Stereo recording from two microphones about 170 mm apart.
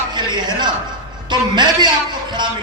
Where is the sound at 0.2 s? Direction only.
25° right (ahead or behind).